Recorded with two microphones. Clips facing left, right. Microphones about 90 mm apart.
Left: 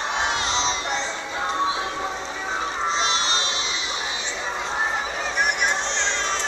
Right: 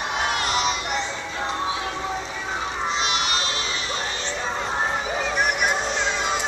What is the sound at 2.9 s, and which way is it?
Music, 30° left (ahead or behind).